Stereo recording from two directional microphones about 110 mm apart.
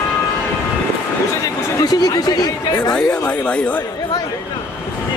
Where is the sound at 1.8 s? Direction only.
35° left (ahead or behind).